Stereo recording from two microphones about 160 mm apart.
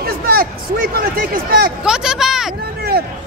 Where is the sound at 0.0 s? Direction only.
70° right (ahead or behind).